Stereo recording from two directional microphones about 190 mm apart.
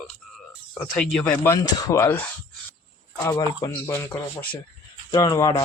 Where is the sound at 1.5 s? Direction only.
15° left (ahead or behind).